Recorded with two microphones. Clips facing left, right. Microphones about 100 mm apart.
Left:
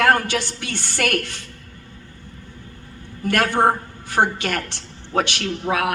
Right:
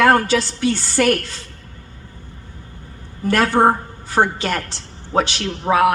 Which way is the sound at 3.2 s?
30° right (ahead or behind).